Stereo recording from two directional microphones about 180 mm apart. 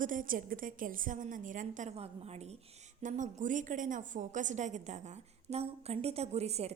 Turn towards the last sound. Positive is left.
turn(degrees=-35)  # may be behind; listen again after turning